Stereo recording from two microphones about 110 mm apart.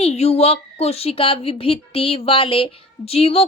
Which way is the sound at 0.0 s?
65° left (ahead or behind).